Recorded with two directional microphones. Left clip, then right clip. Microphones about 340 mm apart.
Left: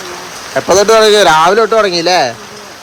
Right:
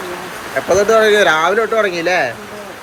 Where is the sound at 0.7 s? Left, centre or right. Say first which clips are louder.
Left 4 dB; left.